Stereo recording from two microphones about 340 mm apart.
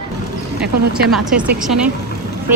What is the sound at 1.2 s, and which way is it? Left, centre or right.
Speech, centre.